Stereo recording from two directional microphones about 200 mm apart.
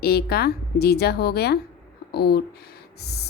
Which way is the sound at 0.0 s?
50° left (ahead or behind).